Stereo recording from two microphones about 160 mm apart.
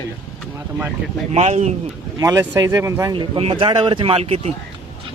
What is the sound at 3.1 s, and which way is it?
Speech, 35° right (ahead or behind).